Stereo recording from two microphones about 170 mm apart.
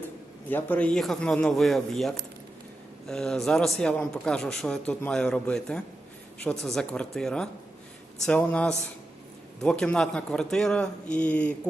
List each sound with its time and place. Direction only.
0.5 s a man's voice: 10° left (ahead or behind)